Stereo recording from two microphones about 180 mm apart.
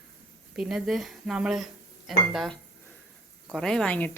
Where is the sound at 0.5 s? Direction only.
5° right (ahead or behind).